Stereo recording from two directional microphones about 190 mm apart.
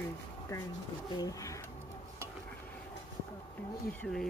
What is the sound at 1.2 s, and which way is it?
Speech, 15° left (ahead or behind).